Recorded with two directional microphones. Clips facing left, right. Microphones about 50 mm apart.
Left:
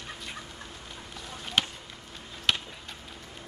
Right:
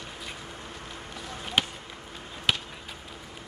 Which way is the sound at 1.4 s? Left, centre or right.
Centre.